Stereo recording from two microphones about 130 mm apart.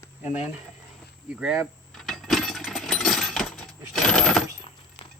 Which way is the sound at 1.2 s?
10° right (ahead or behind).